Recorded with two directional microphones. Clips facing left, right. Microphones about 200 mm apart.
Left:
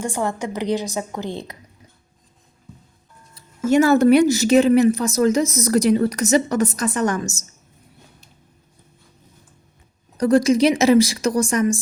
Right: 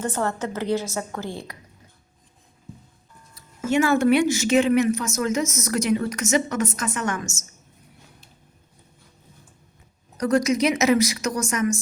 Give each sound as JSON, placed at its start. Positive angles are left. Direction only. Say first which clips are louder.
{"t": 0.0, "sound": "a woman's voice", "louder": "left 2 dB", "side_deg": 15}
{"t": 3.3, "sound": "speech", "louder": "left 5 dB", "side_deg": 40}
{"t": 10.2, "sound": "speech", "louder": "left 5 dB", "side_deg": 30}